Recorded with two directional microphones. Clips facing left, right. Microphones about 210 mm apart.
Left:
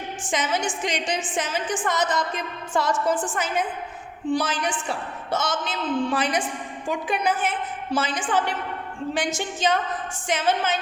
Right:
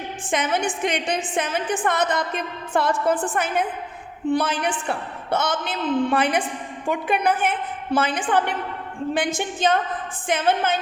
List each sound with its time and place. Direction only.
0.3 s a woman's voice: 55° right (ahead or behind)